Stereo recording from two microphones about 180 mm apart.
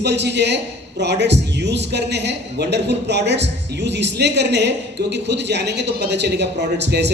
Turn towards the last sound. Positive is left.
turn(degrees=-70)  # may be behind; listen again after turning